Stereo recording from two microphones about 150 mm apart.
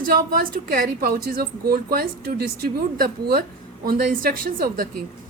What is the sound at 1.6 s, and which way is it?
A woman's voice, 90° right.